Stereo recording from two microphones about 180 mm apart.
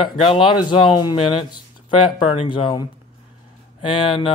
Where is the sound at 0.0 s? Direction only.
30° left (ahead or behind).